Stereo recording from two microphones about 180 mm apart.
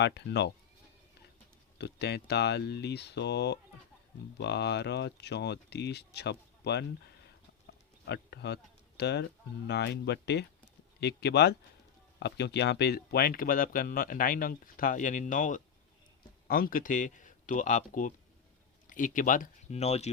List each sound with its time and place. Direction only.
0.0 s speech: 75° left (ahead or behind)
1.8 s speech: 65° left (ahead or behind)
8.0 s speech: 70° left (ahead or behind); by 20.1 s 35° left (ahead or behind)